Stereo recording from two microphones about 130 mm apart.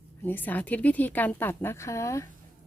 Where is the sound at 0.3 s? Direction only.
15° left (ahead or behind).